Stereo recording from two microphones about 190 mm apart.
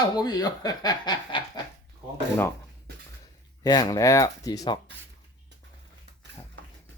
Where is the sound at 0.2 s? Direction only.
20° left (ahead or behind).